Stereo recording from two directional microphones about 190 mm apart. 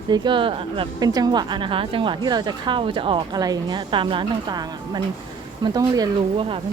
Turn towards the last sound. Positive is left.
turn(degrees=-30)  # may be behind; listen again after turning